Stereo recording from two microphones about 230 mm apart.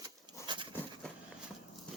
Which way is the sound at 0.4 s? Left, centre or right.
Right.